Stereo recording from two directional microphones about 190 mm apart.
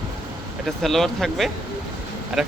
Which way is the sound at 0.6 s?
Centre (ahead or behind).